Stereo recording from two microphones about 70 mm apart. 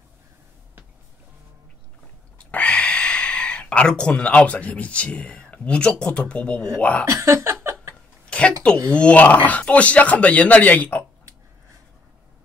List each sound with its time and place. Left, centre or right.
2.3 s speech: centre
7.1 s speech: right
8.3 s a sound: centre
8.9 s speech: centre